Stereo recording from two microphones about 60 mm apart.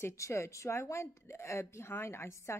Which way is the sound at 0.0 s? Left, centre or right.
Left.